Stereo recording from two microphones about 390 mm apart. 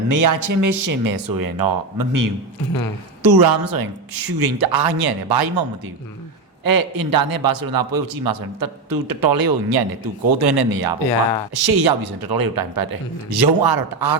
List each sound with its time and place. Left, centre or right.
0.1 s a man's voice: right
6.7 s a man's voice: right